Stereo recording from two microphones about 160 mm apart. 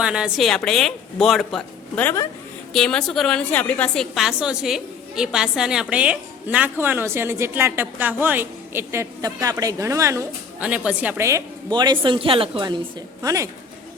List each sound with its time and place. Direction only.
0.0 s a woman's voice: 5° right (ahead or behind); by 12.7 s 30° right (ahead or behind)
13.2 s speech: 20° right (ahead or behind)